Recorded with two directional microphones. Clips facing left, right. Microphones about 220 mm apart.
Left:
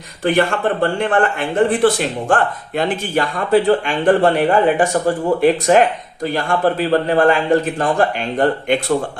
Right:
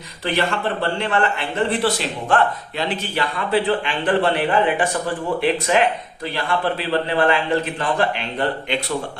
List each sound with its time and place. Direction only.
0.3 s a man's voice: 50° left (ahead or behind)